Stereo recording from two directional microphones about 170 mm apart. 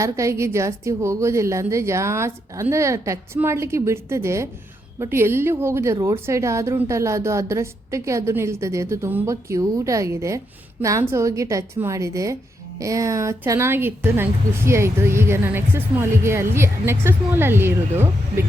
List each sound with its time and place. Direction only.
0.0 s a woman's voice: 15° right (ahead or behind)